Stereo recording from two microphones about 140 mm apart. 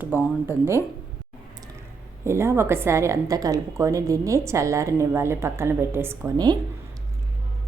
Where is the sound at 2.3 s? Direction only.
20° right (ahead or behind).